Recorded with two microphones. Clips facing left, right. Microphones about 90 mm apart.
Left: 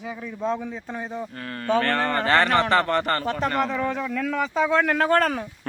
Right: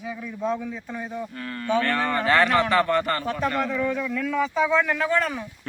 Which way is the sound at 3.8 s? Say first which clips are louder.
Even; 35° left (ahead or behind).